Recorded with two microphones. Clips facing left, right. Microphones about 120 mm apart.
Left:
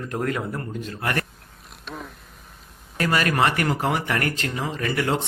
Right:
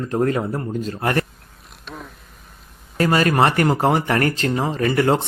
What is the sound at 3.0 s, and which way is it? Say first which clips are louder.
Speech: right 5 dB; 30° right (ahead or behind).